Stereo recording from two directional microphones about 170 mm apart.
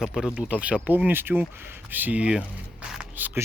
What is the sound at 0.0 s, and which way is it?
Speech, 5° right (ahead or behind).